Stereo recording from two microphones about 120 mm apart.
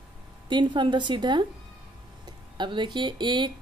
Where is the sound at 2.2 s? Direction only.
40° right (ahead or behind).